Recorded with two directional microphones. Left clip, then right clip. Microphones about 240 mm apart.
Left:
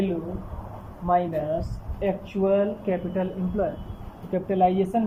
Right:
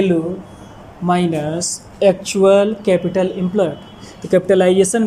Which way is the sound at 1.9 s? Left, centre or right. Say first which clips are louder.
Right 13 dB; right.